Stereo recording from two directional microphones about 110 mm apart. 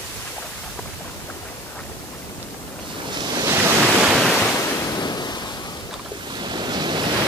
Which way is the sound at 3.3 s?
30° right (ahead or behind).